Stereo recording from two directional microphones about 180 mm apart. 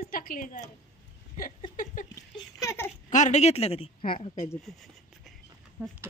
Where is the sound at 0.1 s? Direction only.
50° left (ahead or behind).